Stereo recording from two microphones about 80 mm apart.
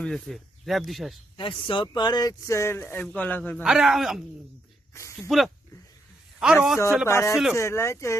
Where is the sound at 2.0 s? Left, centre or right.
Left.